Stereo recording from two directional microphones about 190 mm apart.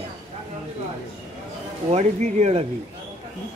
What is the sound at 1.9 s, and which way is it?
Speech, 35° right (ahead or behind).